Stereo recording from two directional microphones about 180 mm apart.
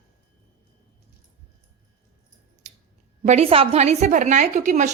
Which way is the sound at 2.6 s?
40° right (ahead or behind).